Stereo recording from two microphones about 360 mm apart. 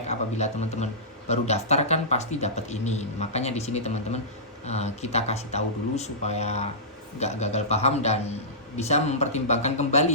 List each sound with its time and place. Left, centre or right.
0.1 s speech: centre